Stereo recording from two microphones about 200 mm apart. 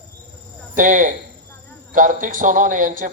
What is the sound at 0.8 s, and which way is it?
A man's voice, 40° right (ahead or behind).